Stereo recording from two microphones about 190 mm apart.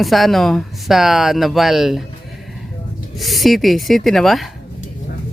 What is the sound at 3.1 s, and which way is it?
Speech, centre (ahead or behind).